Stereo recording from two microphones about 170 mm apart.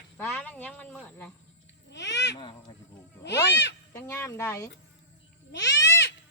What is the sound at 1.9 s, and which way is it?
Babbling, 90° left.